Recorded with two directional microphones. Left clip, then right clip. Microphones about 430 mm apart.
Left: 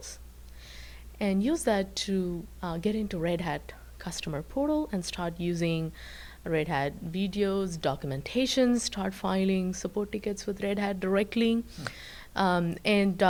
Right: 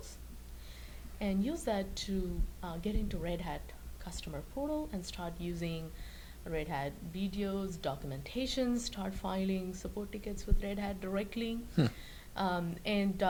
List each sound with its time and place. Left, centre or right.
1.2 s speech: left